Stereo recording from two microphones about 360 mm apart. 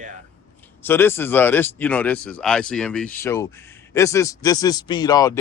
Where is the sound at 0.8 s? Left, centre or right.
Centre.